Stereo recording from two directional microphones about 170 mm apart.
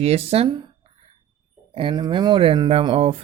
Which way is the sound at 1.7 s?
30° right (ahead or behind).